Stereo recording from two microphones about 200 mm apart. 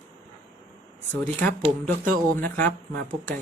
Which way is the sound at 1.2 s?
10° left (ahead or behind).